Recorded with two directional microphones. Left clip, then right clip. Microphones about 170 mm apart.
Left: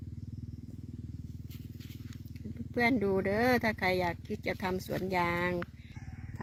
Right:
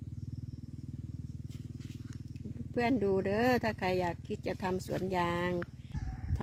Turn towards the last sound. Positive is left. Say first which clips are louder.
# left 2 dB
turn(degrees=-10)  # may be behind; listen again after turning